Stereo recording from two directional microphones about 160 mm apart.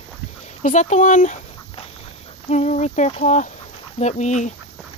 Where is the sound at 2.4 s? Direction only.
45° left (ahead or behind).